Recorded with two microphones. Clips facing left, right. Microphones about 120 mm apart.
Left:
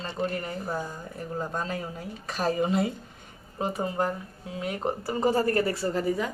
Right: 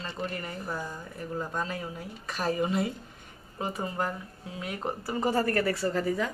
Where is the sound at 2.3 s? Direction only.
25° left (ahead or behind).